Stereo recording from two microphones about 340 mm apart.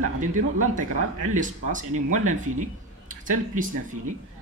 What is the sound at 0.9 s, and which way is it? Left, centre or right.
Speech, right.